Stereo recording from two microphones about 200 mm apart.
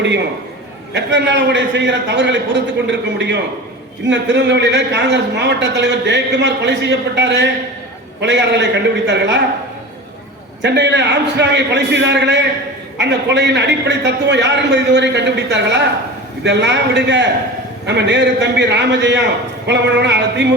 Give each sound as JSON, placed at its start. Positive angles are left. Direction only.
{"t": 0.9, "sound": "a man's voice", "side_deg": -60}
{"t": 10.6, "sound": "a man's voice", "side_deg": -60}